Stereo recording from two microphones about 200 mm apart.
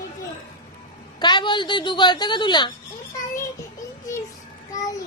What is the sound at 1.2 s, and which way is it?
Speech, 25° left (ahead or behind).